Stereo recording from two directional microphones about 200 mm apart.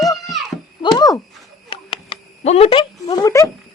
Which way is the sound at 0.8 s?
20° left (ahead or behind).